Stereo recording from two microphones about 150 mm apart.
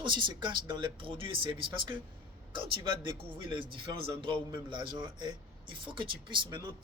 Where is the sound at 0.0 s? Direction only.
35° right (ahead or behind).